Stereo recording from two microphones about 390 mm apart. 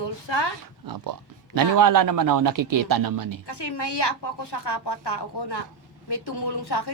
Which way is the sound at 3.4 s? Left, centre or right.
Left.